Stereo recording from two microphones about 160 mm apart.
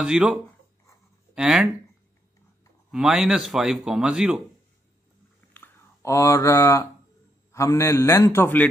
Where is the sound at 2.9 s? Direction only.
5° right (ahead or behind).